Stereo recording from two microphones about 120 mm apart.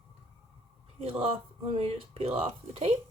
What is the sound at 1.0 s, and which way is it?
Speech, 55° right (ahead or behind).